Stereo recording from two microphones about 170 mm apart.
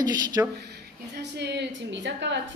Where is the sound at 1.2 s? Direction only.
85° right.